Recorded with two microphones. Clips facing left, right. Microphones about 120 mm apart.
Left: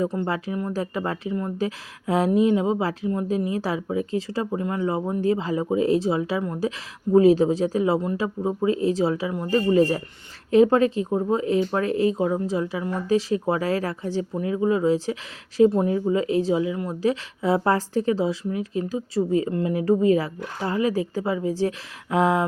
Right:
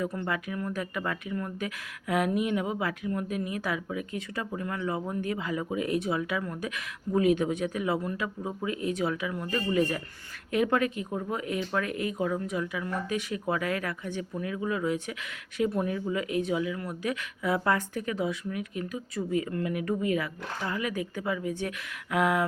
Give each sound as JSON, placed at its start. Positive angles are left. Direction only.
{"t": 0.0, "sound": "speech", "side_deg": 25}